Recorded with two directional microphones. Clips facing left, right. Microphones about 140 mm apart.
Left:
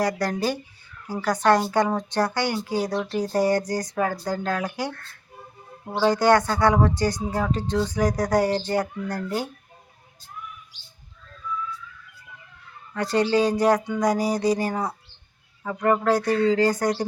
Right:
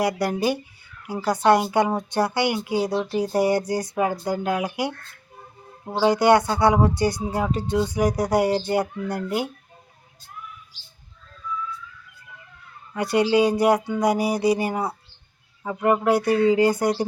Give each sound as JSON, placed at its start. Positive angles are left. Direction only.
{"t": 0.0, "sound": "speech", "side_deg": -10}
{"t": 6.0, "sound": "speech", "side_deg": -10}
{"t": 12.9, "sound": "speech", "side_deg": -10}